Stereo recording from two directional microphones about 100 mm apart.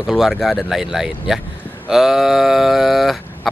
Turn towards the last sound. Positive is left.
turn(degrees=0)  # may be behind; listen again after turning